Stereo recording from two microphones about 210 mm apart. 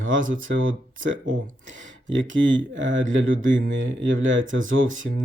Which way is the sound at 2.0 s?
65° right (ahead or behind).